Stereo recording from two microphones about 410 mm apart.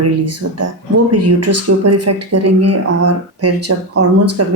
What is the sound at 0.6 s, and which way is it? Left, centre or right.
A woman's voice, right.